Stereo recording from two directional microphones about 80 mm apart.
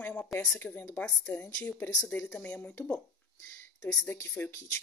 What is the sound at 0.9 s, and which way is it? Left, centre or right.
Speech, centre.